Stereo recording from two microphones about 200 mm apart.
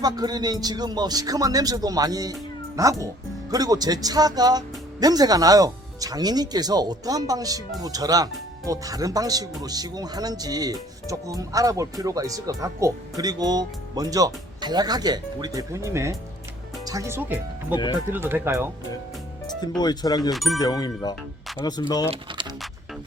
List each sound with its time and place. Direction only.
0.0 s speech: 20° right (ahead or behind)
19.8 s speech: 20° left (ahead or behind)
20.3 s speech: centre (ahead or behind)
20.6 s speech: 20° left (ahead or behind)
22.1 s typing: 25° right (ahead or behind)